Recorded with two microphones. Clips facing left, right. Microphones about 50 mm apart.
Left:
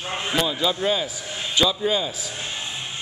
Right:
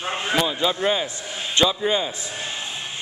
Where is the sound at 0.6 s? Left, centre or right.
Centre.